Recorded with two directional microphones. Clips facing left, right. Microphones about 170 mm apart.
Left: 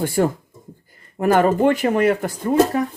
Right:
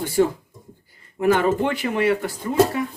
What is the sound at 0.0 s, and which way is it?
Speech, 50° left (ahead or behind).